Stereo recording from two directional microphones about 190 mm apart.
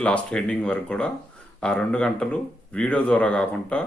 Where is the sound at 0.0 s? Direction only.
5° left (ahead or behind).